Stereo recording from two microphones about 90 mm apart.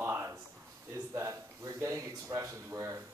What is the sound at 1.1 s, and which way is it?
A man's voice, 35° right (ahead or behind).